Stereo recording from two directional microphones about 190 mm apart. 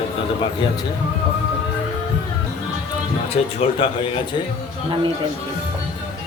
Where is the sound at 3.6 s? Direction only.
35° left (ahead or behind).